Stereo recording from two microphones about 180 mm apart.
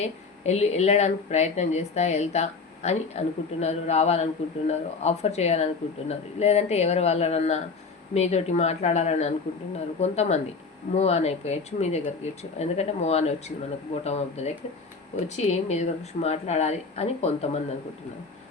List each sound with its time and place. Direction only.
0.0 s speech: 35° left (ahead or behind)